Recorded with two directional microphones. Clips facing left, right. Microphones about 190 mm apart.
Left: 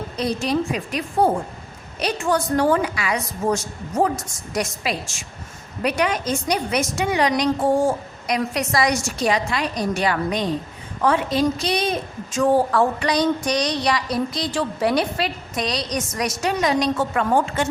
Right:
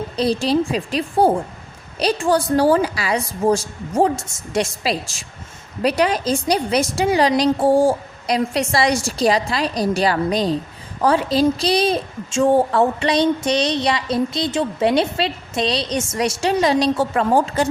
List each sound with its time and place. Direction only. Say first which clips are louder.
0.2 s a woman's voice: right 4 dB; 30° right (ahead or behind)